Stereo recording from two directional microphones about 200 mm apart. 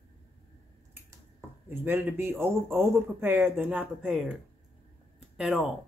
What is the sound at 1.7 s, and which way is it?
Speech, 10° right (ahead or behind).